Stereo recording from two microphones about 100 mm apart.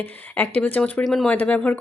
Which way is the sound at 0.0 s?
15° left (ahead or behind).